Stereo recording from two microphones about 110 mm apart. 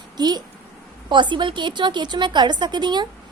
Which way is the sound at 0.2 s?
40° right (ahead or behind).